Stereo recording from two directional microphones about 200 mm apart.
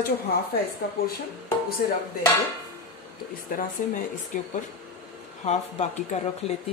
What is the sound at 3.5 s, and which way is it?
Speech, 45° left (ahead or behind).